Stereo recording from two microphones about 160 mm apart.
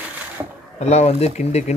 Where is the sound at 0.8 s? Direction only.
40° left (ahead or behind).